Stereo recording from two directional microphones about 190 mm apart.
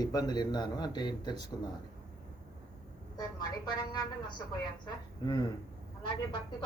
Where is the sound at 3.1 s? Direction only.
20° left (ahead or behind).